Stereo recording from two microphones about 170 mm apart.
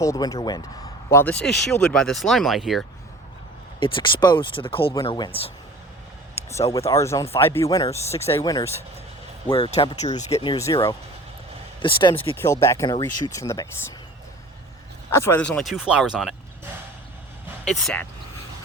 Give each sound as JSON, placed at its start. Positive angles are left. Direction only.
{"t": 0.0, "sound": "speech", "side_deg": 20}
{"t": 1.1, "sound": "speech", "side_deg": 10}
{"t": 3.8, "sound": "speech", "side_deg": 30}
{"t": 6.7, "sound": "speech", "side_deg": 15}
{"t": 7.9, "sound": "speech", "side_deg": 35}
{"t": 8.2, "sound": "speech", "side_deg": 15}
{"t": 9.5, "sound": "speech", "side_deg": 35}
{"t": 10.3, "sound": "speech", "side_deg": 30}
{"t": 11.8, "sound": "speech", "side_deg": 30}
{"t": 12.1, "sound": "speech", "side_deg": 15}
{"t": 15.1, "sound": "speech", "side_deg": 15}
{"t": 17.7, "sound": "speech", "side_deg": 5}